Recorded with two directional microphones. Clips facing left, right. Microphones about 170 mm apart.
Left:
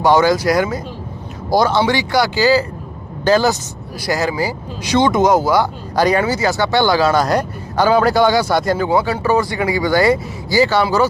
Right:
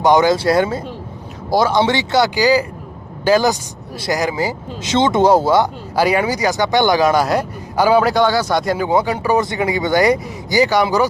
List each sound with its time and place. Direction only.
0.0 s speech: 20° right (ahead or behind)
1.5 s speech: centre (ahead or behind)
1.8 s speech: 25° right (ahead or behind)
6.0 s speech: 10° right (ahead or behind)
8.1 s speech: 10° left (ahead or behind)
8.8 s speech: 20° right (ahead or behind)